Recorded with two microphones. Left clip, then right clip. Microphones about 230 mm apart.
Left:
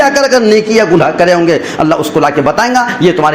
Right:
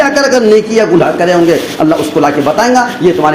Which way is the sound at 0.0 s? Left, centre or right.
Left.